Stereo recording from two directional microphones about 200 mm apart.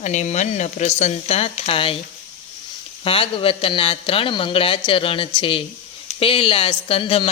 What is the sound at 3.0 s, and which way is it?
A man's voice, 25° left (ahead or behind).